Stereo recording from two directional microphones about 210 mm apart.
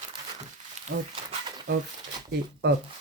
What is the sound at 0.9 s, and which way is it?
Speech, 55° right (ahead or behind).